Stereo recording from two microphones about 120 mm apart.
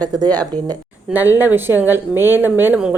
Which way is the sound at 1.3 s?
15° right (ahead or behind).